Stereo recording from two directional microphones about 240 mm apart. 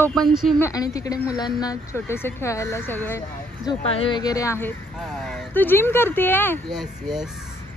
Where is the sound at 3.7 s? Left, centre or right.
Left.